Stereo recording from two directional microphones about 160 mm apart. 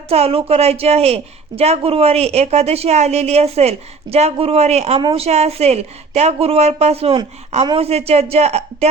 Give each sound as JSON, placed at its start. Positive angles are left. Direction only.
{"t": 0.1, "sound": "a woman's voice", "side_deg": -40}